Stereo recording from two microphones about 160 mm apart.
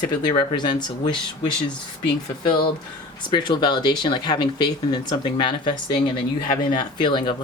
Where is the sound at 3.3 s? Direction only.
30° left (ahead or behind).